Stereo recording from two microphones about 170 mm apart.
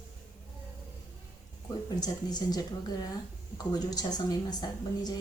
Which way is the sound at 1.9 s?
20° left (ahead or behind).